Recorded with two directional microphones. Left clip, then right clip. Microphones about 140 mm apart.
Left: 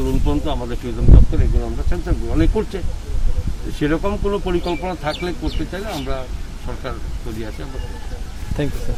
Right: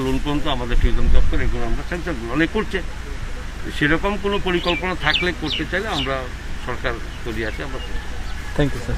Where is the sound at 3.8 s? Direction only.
20° left (ahead or behind).